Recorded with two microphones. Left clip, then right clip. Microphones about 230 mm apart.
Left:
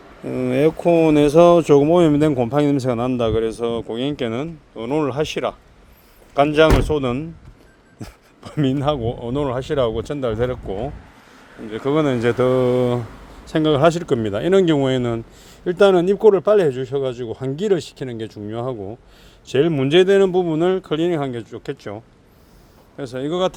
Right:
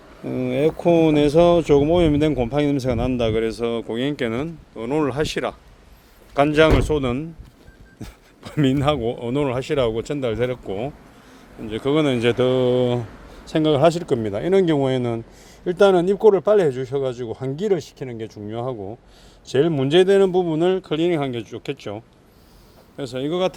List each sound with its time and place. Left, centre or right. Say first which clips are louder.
0.3 s speech: left 3 dB; centre